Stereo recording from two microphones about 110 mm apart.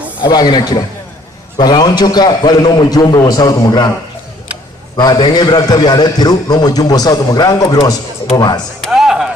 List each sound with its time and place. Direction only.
0.2 s a man's voice: 40° left (ahead or behind)
4.9 s a man's voice: 35° left (ahead or behind)
8.9 s music: 5° right (ahead or behind)